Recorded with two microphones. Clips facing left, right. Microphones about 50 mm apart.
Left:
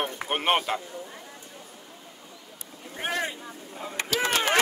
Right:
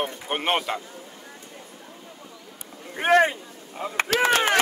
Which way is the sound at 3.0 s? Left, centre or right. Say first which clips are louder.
Right 11 dB; right.